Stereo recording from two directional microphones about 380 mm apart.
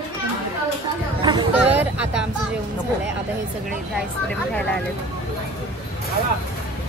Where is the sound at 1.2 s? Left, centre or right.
Centre.